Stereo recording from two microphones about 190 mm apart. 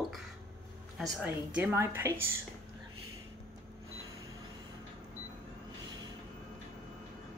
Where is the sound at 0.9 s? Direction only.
5° right (ahead or behind).